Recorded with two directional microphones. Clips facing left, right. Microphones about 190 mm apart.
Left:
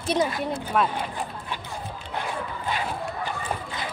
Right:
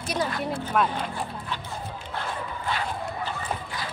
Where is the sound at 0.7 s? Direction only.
Centre (ahead or behind).